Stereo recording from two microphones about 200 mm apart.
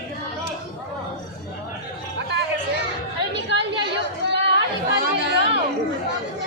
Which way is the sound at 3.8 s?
60° right (ahead or behind).